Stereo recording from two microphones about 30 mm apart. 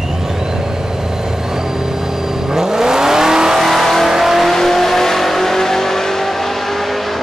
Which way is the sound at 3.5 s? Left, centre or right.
Centre.